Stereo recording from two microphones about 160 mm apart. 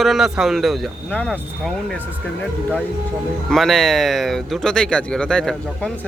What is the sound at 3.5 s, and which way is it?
Speech, centre (ahead or behind).